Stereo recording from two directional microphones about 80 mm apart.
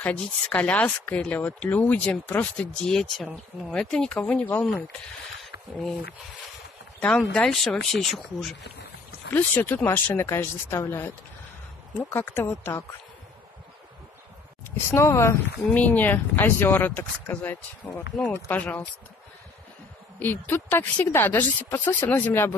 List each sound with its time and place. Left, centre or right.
0.0 s a woman's voice: left
5.4 s a sound: centre
7.0 s speech: centre
9.3 s a woman's voice: left
14.9 s speech: left
15.7 s a woman's voice: left
20.2 s a woman's voice: left